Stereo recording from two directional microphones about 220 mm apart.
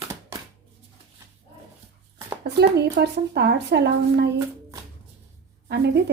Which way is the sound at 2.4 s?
50° right (ahead or behind).